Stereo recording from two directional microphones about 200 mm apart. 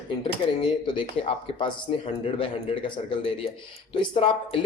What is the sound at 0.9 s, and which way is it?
Speech, 25° left (ahead or behind).